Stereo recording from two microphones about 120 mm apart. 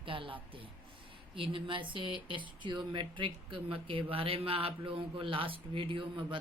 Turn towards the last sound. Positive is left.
turn(degrees=-45)  # may be behind; listen again after turning